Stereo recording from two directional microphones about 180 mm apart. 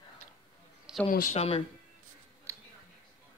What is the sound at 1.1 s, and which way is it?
Speech, 50° left (ahead or behind).